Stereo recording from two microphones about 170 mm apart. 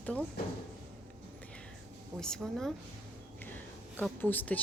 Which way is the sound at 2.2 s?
Centre (ahead or behind).